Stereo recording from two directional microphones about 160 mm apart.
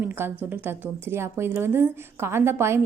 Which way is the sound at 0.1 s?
15° right (ahead or behind).